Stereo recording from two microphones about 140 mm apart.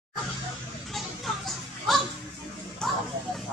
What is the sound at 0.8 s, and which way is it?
Children playing, centre (ahead or behind).